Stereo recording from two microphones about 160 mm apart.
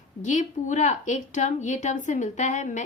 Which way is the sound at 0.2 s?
50° left (ahead or behind).